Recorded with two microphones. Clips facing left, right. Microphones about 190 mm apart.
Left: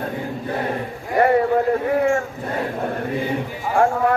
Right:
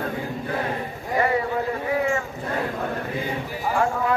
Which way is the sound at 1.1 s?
55° left (ahead or behind).